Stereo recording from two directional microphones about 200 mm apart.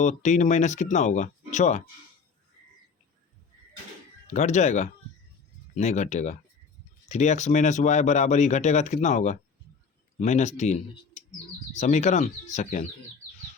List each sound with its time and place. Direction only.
0.0 s speech: 35° left (ahead or behind)
4.3 s speech: 35° left (ahead or behind)